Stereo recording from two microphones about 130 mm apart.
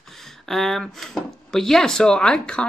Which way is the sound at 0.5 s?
Centre (ahead or behind).